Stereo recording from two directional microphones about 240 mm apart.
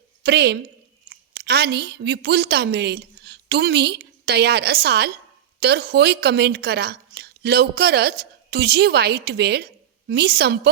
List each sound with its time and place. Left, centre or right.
0.2 s a woman's voice: right